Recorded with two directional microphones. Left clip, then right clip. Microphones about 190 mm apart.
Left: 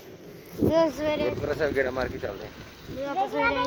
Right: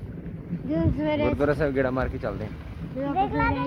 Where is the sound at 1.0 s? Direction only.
30° right (ahead or behind).